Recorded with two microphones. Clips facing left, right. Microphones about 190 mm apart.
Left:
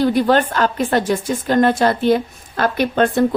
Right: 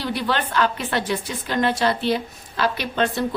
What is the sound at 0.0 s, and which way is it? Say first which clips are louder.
A woman's voice: left 10 dB; 45° left (ahead or behind).